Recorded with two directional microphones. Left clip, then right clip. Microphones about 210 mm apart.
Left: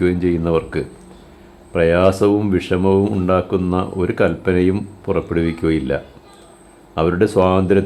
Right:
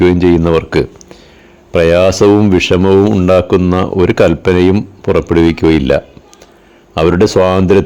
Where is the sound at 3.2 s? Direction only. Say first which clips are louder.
Right 8 dB; 45° right (ahead or behind).